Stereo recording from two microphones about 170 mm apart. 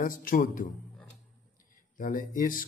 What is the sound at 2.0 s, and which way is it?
Speech, 50° left (ahead or behind).